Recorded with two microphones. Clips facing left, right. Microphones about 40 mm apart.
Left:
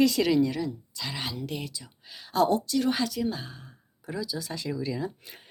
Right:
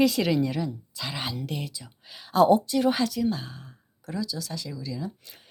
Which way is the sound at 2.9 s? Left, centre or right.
Centre.